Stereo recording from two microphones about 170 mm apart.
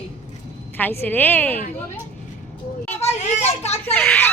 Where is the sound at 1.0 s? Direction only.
10° left (ahead or behind).